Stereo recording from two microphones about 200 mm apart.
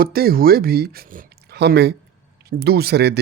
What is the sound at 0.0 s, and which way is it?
Speech, 50° right (ahead or behind).